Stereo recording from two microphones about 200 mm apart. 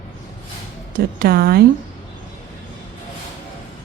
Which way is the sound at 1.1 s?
50° right (ahead or behind).